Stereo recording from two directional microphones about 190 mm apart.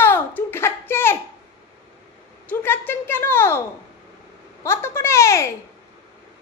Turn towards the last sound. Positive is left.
turn(degrees=15)  # may be behind; listen again after turning